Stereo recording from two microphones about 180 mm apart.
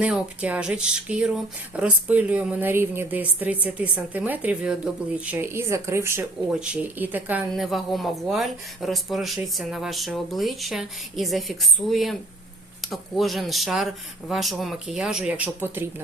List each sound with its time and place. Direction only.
0.0 s speech: 5° right (ahead or behind)